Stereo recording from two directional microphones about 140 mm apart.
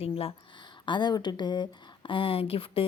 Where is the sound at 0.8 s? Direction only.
35° left (ahead or behind).